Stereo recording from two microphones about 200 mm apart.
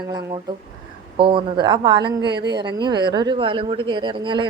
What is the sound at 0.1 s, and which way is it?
Speech, 20° right (ahead or behind).